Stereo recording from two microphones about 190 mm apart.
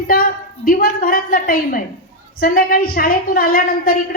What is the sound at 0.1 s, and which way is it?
A woman's voice, 50° left (ahead or behind).